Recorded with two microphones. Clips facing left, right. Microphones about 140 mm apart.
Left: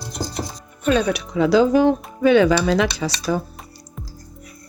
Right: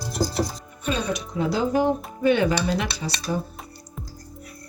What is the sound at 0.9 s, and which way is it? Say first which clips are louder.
Speech: left 7 dB; 65° left (ahead or behind).